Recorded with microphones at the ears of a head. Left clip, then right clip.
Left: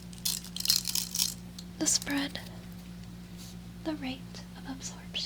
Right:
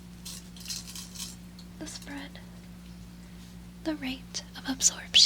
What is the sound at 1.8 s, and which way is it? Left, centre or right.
Speech, left.